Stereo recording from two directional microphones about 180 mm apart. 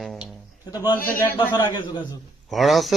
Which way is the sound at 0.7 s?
15° left (ahead or behind).